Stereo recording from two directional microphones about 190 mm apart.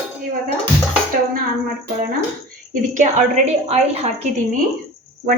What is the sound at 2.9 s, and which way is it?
A woman's voice, 40° right (ahead or behind).